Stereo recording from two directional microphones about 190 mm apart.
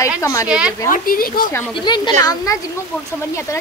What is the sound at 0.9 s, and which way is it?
Speech, 50° left (ahead or behind).